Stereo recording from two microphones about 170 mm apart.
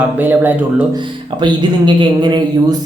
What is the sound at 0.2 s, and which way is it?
Speech, 10° right (ahead or behind).